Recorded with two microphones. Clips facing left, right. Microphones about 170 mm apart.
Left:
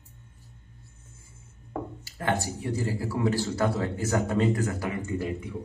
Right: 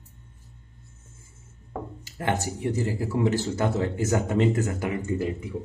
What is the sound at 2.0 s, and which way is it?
Speech, 20° right (ahead or behind).